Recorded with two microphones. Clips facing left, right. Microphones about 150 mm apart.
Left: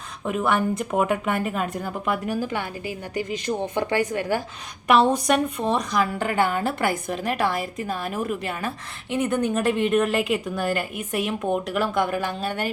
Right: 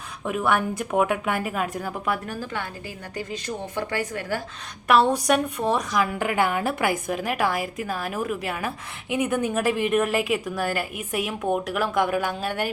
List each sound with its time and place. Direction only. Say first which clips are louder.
0.3 s a woman's voice: left 1 dB; centre (ahead or behind)
2.1 s a woman's voice: left 5 dB; 15° left (ahead or behind)
4.9 s a woman's voice: even; 10° left (ahead or behind)
5.3 s a woman's voice: even; 5° right (ahead or behind)